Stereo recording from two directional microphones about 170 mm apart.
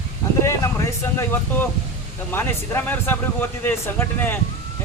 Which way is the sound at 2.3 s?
10° left (ahead or behind).